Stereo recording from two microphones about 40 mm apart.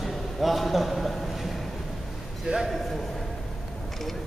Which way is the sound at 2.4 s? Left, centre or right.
Centre.